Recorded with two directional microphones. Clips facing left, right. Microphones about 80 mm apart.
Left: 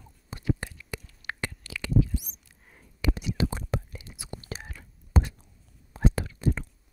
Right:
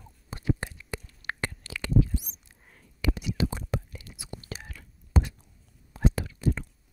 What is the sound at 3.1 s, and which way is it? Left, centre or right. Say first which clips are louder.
Whispering: even; left.